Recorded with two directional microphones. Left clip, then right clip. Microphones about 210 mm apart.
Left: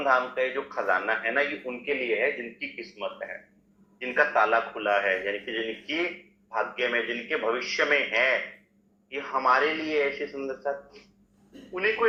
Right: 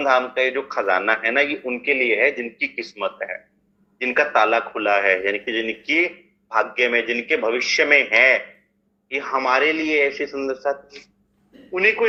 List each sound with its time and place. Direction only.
0.0 s speech: 55° right (ahead or behind)